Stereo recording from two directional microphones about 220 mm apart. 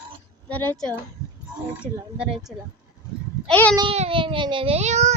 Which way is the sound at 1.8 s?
5° right (ahead or behind).